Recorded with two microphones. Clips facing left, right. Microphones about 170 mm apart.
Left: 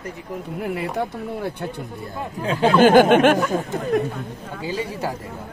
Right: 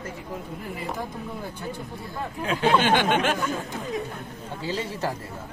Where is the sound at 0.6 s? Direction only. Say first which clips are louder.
Left 10 dB; 70° left (ahead or behind).